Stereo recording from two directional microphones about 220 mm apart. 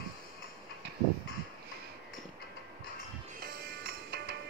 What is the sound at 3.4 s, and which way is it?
Music, 45° right (ahead or behind).